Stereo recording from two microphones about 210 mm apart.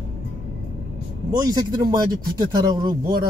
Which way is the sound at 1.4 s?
20° right (ahead or behind).